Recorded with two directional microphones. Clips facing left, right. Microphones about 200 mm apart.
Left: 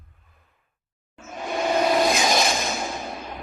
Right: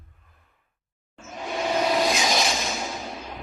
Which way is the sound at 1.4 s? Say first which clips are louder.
Left 3 dB; 50° left (ahead or behind).